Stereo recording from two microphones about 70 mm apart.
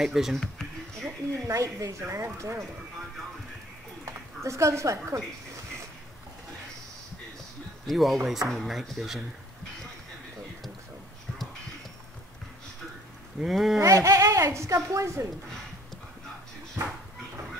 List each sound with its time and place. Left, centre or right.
0.0 s speech: centre
1.5 s speech: right
4.0 s speech: right
7.8 s speech: centre
13.4 s speech: centre
13.7 s speech: right